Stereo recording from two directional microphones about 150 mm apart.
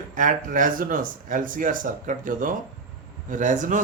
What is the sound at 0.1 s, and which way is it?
Speech, 60° right (ahead or behind).